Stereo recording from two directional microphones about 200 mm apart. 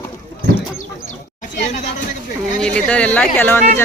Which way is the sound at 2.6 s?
5° left (ahead or behind).